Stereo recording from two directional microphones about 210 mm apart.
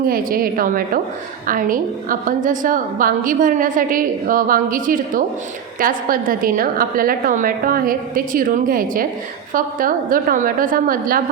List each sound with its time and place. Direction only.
0.1 s a woman's voice: 45° right (ahead or behind)